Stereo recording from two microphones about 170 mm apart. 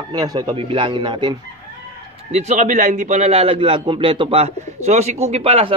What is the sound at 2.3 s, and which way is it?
A man's voice, 40° right (ahead or behind).